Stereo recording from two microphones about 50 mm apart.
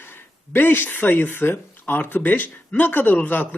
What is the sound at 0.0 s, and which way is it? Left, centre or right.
Speech, left.